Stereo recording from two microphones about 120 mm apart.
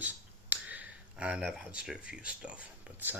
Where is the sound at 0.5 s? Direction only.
15° right (ahead or behind).